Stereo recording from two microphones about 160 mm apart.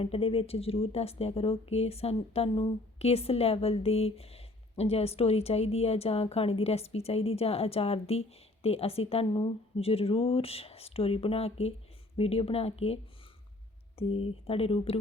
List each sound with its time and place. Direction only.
0.0 s speech: 35° left (ahead or behind)